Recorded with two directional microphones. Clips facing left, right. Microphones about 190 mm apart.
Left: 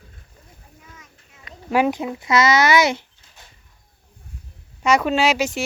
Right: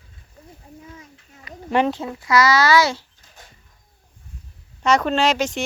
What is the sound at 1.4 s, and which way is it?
Speech, 5° left (ahead or behind).